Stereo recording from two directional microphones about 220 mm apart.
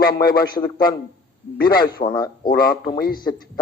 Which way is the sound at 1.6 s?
20° left (ahead or behind).